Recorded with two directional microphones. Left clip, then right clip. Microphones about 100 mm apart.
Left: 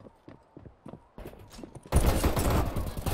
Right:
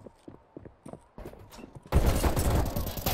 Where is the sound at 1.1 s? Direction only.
5° left (ahead or behind).